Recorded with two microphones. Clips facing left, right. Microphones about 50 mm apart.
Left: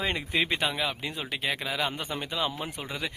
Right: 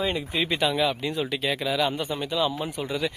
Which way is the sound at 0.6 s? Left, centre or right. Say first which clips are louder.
Right 6 dB; left.